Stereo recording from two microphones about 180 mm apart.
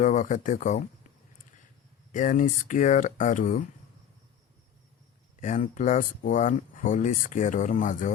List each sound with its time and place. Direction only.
0.0 s speech: 45° left (ahead or behind)
2.1 s speech: 45° left (ahead or behind)
5.4 s speech: 45° left (ahead or behind)